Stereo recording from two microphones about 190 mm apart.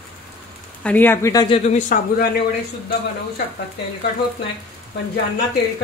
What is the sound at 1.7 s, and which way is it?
Speech, 40° left (ahead or behind).